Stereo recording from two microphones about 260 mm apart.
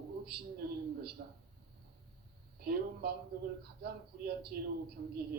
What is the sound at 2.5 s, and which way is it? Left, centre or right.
A man's voice, right.